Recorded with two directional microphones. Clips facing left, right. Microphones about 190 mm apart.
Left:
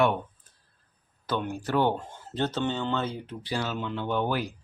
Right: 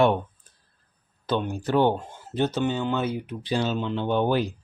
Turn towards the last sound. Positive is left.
turn(degrees=-25)  # may be behind; listen again after turning